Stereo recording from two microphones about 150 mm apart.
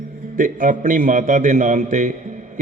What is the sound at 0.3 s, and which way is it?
A man's voice, 65° right (ahead or behind).